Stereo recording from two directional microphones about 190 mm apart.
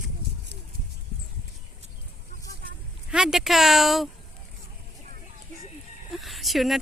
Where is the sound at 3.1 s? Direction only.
Centre (ahead or behind).